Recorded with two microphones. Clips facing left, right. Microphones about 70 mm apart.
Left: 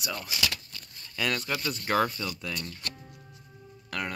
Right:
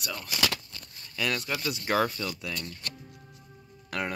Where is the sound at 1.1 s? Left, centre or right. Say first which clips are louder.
Even; centre.